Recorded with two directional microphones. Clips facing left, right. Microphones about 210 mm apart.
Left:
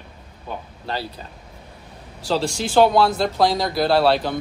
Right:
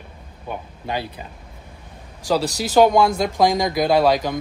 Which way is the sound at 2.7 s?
15° right (ahead or behind).